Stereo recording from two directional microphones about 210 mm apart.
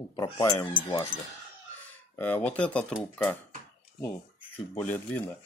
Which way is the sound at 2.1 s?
10° left (ahead or behind).